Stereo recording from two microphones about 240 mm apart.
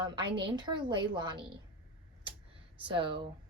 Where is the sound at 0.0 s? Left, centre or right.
Centre.